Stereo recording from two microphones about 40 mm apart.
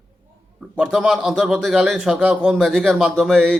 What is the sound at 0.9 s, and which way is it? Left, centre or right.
Speech, centre.